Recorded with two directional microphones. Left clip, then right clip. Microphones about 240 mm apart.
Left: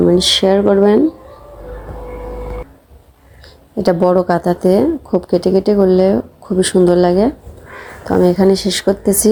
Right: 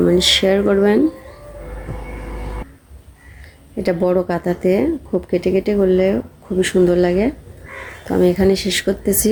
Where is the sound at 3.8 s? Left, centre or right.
Centre.